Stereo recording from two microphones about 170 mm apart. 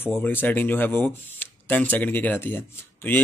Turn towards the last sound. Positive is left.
turn(degrees=10)  # may be behind; listen again after turning